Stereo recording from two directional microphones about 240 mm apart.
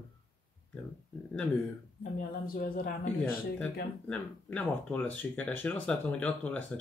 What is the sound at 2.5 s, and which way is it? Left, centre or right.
Speech, left.